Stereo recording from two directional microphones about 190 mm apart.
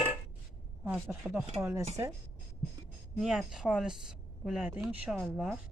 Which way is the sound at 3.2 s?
Centre (ahead or behind).